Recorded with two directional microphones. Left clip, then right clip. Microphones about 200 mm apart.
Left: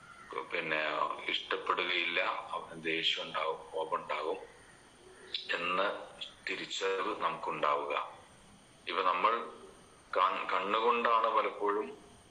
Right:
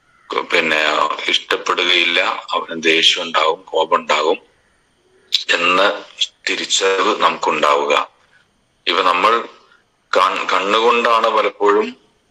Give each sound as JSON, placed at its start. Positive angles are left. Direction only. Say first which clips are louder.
{"t": 0.3, "sound": "speech", "louder": "right 19 dB", "side_deg": -60}